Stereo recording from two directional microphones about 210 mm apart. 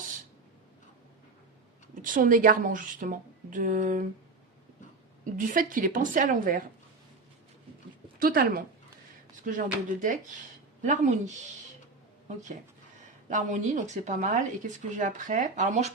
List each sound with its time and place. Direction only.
2.0 s speech: 40° right (ahead or behind)
5.2 s speech: 40° right (ahead or behind)
8.2 s speech: 45° right (ahead or behind)
13.2 s speech: 35° right (ahead or behind)